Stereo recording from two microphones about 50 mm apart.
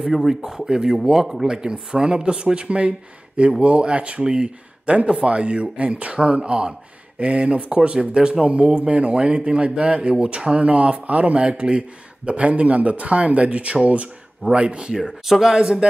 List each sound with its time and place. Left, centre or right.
0.0 s speech: centre
15.0 s speech: centre
15.5 s speech: centre